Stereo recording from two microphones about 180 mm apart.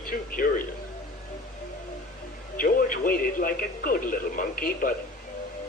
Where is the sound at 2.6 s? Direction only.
50° left (ahead or behind).